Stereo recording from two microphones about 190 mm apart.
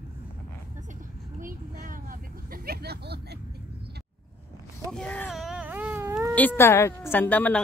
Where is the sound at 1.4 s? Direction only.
45° right (ahead or behind).